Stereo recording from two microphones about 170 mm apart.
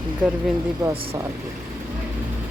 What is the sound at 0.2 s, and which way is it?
Speech, 5° right (ahead or behind).